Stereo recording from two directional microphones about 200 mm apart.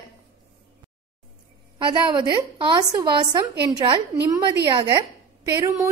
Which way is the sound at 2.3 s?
20° right (ahead or behind).